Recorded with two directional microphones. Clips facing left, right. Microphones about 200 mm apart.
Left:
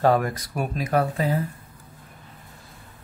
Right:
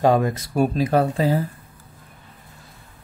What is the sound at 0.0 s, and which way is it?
Speech, 20° right (ahead or behind).